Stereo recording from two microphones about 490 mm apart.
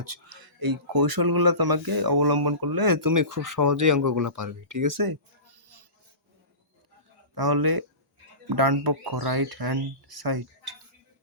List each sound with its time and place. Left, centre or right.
0.0 s speech: right
7.3 s speech: right